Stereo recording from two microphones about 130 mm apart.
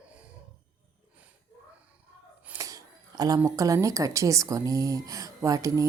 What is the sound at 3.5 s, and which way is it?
A woman's voice, 25° right (ahead or behind).